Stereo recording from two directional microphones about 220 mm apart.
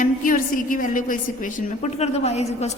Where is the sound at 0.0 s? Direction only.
40° left (ahead or behind).